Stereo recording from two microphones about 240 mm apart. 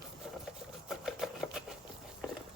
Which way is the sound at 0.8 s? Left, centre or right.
Centre.